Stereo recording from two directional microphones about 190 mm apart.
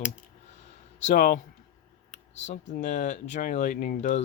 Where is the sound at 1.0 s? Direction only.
45° left (ahead or behind).